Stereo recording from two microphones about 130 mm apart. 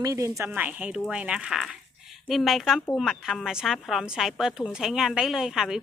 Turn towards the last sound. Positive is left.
turn(degrees=-5)  # may be behind; listen again after turning